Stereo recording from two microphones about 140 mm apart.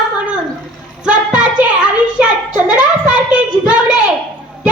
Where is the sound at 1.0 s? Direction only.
5° right (ahead or behind).